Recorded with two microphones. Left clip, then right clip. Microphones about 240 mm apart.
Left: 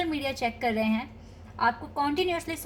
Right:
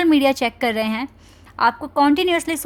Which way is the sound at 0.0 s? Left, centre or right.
Right.